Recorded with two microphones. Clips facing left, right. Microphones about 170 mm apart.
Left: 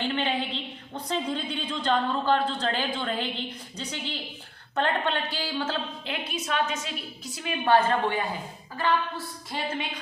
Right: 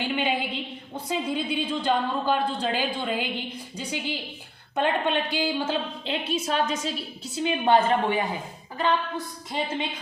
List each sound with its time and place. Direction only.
0.0 s a woman's voice: 10° right (ahead or behind)
6.3 s a woman's voice: 35° right (ahead or behind)
7.3 s a woman's voice: 20° right (ahead or behind)